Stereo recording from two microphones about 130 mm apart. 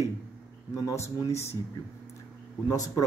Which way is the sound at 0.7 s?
25° left (ahead or behind).